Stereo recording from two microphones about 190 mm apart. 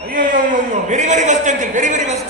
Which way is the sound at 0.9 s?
40° right (ahead or behind).